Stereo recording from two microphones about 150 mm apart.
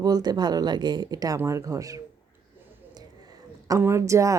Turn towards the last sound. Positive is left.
turn(degrees=-20)  # may be behind; listen again after turning